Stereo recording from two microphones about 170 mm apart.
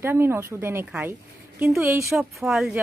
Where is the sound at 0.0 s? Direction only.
15° right (ahead or behind).